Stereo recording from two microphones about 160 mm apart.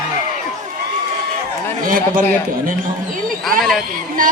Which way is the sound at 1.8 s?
60° right (ahead or behind).